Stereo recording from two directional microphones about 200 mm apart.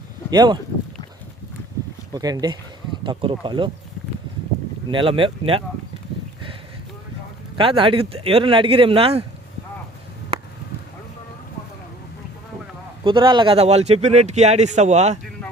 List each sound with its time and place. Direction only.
0.3 s speech: 20° right (ahead or behind)
2.1 s speech: 20° right (ahead or behind)
4.9 s speech: 25° right (ahead or behind)
7.5 s speech: 25° right (ahead or behind)
13.1 s a man's voice: 25° right (ahead or behind)